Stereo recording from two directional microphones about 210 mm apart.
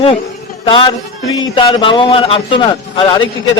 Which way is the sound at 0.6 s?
25° left (ahead or behind).